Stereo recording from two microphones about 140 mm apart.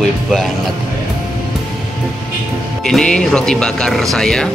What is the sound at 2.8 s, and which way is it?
Speech, 5° left (ahead or behind).